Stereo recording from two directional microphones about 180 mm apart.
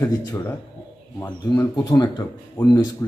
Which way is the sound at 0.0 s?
15° left (ahead or behind).